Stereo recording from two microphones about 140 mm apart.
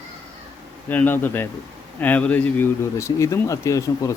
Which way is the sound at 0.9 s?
15° left (ahead or behind).